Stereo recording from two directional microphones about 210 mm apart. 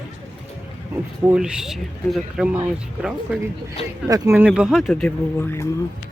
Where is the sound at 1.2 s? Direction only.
5° right (ahead or behind).